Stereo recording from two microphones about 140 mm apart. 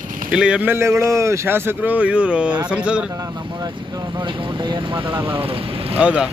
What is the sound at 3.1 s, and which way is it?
Speech, 30° right (ahead or behind).